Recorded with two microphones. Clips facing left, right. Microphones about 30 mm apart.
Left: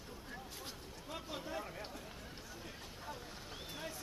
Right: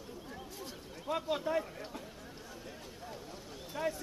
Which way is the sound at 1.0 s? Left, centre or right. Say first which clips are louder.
Right 12 dB; right.